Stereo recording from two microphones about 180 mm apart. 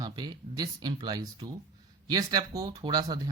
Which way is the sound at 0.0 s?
20° right (ahead or behind).